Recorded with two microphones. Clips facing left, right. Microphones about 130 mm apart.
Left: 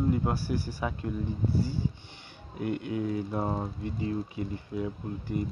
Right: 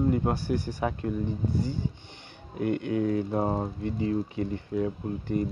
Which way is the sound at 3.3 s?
35° right (ahead or behind).